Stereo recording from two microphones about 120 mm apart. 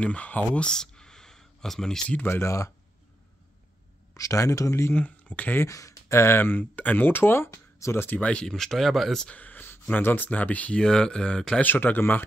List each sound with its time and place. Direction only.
0.0 s speech: 10° left (ahead or behind)
4.1 s speech: 25° left (ahead or behind)
5.7 s speech: 25° left (ahead or behind)